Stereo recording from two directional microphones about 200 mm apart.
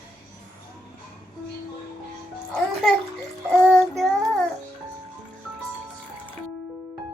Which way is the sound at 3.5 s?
Centre (ahead or behind).